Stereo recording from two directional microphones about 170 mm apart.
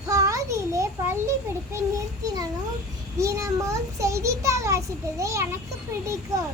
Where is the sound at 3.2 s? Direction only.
20° right (ahead or behind).